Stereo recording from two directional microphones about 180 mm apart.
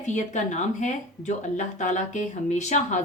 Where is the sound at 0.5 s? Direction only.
40° left (ahead or behind).